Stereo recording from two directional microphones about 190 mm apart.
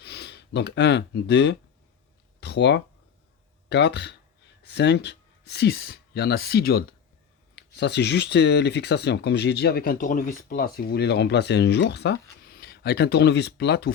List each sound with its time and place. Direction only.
0.0 s speech: 60° left (ahead or behind)